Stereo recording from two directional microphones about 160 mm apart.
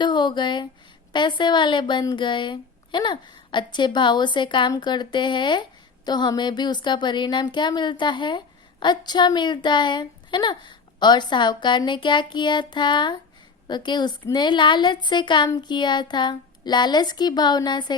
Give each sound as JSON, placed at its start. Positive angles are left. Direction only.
{"t": 0.0, "sound": "speech", "side_deg": 30}